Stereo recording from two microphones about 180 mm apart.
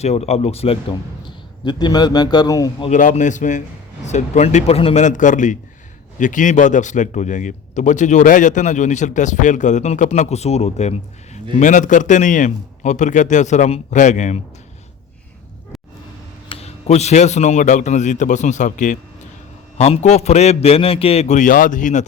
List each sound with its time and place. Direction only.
0.0 s a man's voice: 35° left (ahead or behind); by 2.9 s 20° left (ahead or behind)
2.9 s a man's voice: 45° left (ahead or behind)
16.5 s a man's voice: 35° left (ahead or behind)